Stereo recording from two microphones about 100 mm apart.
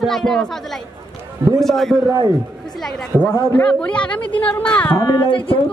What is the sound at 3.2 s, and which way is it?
Speech, 25° left (ahead or behind).